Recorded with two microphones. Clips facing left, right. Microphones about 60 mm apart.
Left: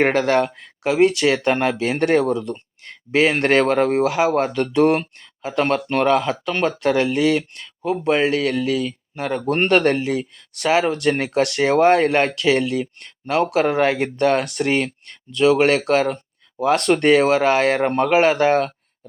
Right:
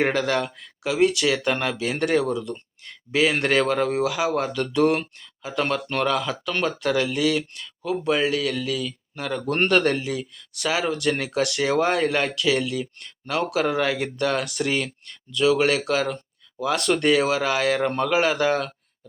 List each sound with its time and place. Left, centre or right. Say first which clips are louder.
0.0 s speech: left 5 dB; left